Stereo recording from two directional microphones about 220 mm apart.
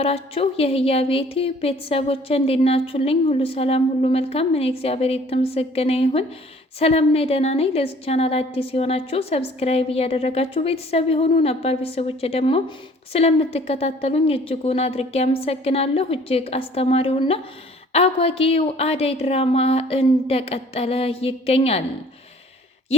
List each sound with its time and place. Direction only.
0.0 s a woman's voice: 25° left (ahead or behind)